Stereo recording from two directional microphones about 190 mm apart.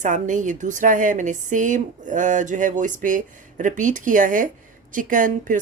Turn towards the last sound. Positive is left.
turn(degrees=-45)  # may be behind; listen again after turning